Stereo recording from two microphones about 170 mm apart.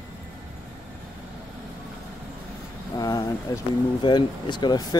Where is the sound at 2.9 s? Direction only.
20° left (ahead or behind).